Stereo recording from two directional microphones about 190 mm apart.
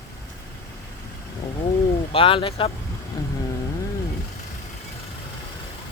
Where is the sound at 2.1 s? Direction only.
30° left (ahead or behind).